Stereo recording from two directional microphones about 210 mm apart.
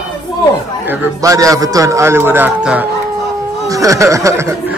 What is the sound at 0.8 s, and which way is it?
A man's voice, 10° right (ahead or behind).